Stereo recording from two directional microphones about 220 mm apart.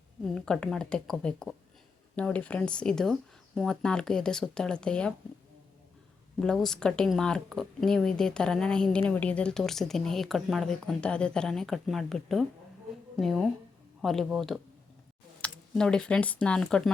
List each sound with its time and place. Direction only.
0.3 s speech: 5° left (ahead or behind)
6.4 s speech: centre (ahead or behind)